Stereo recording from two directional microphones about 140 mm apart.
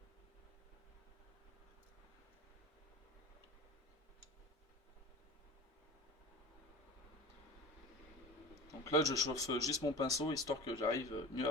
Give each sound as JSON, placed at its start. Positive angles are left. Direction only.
{"t": 8.8, "sound": "speech", "side_deg": 25}